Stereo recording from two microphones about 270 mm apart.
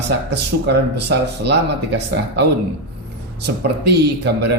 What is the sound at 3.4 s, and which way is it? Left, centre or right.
Speech, right.